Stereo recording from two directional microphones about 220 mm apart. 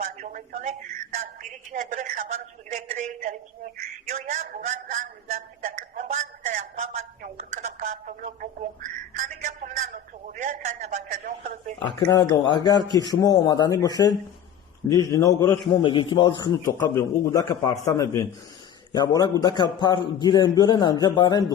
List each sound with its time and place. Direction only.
0.0 s a woman's voice: 35° right (ahead or behind)
4.1 s a sound: 35° right (ahead or behind)
11.9 s a man's voice: 20° left (ahead or behind)